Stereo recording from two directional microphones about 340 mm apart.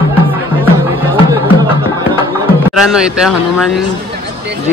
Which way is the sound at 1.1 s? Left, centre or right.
Centre.